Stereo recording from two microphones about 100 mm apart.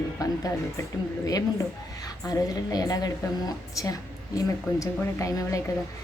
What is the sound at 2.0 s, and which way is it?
A woman's voice, 40° left (ahead or behind).